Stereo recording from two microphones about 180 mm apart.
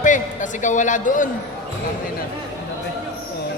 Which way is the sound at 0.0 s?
45° left (ahead or behind).